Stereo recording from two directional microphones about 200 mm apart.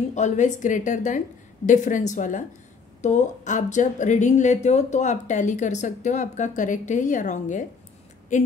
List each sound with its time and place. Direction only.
0.1 s speech: 35° left (ahead or behind)